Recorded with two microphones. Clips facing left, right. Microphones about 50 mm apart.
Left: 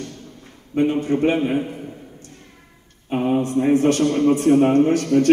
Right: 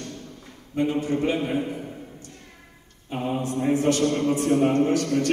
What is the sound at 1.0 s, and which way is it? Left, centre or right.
Speech, left.